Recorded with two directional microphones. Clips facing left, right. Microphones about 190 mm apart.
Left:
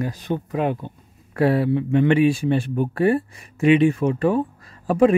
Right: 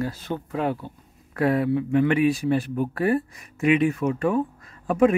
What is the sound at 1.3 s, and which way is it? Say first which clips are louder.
Speech: left 3 dB; 30° left (ahead or behind).